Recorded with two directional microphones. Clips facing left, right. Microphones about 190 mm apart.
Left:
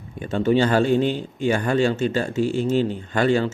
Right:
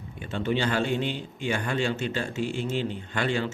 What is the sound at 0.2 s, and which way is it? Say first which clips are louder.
A man's voice: left 8 dB; 40° left (ahead or behind).